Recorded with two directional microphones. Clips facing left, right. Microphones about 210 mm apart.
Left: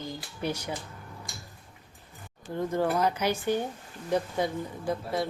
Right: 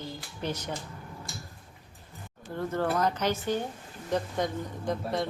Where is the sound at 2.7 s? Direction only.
10° left (ahead or behind).